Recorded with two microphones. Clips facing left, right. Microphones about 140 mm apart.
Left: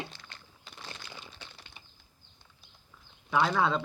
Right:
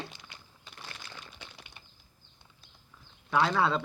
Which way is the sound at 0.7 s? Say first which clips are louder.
Left 1 dB; 10° left (ahead or behind).